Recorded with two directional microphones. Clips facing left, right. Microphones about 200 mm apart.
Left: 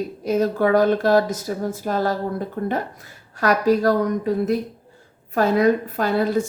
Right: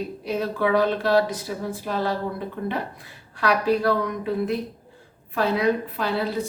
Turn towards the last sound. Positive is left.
turn(degrees=50)  # may be behind; listen again after turning